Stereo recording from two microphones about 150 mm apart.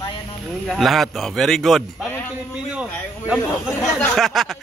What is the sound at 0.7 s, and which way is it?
Speech, centre (ahead or behind).